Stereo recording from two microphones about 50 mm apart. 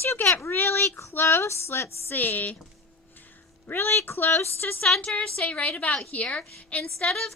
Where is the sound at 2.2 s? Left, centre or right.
Left.